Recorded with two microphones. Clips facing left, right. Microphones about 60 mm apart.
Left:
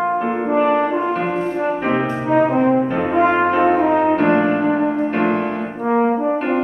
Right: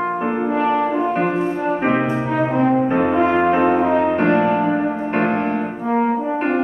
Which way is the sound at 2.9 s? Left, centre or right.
Right.